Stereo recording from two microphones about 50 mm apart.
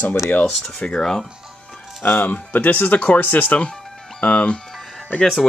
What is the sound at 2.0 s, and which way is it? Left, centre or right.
Speech, left.